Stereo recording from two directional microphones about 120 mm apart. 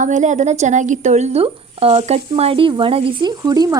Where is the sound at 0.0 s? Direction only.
90° right.